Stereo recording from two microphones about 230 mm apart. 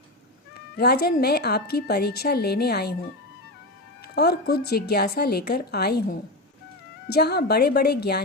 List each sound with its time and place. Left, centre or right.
0.5 s speech: left
4.1 s speech: left